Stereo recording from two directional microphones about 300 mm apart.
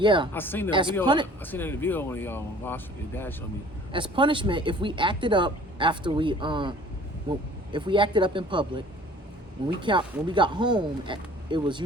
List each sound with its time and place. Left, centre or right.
0.0 s speech: centre
0.3 s speech: centre
0.7 s speech: centre
1.4 s speech: centre
3.9 s speech: centre
9.8 s speech: centre